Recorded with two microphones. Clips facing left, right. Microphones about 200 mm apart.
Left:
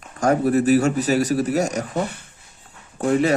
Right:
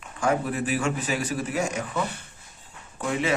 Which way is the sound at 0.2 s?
40° left (ahead or behind).